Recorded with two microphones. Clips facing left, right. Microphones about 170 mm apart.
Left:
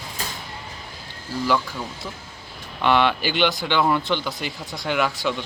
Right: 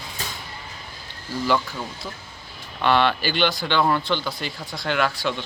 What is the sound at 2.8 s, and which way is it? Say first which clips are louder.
Speech: even; 15° left (ahead or behind).